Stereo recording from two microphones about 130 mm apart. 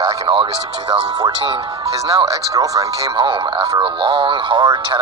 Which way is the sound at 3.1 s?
40° right (ahead or behind).